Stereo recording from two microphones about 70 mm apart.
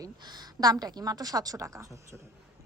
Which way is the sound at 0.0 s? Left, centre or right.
Right.